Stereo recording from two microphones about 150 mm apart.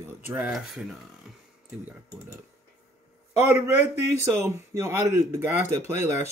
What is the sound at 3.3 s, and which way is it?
A man's voice, 20° right (ahead or behind).